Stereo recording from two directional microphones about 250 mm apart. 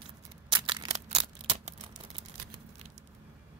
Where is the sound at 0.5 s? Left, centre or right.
Centre.